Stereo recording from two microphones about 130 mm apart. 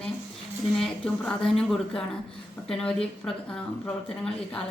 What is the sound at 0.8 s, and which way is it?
A woman's voice, 5° left (ahead or behind).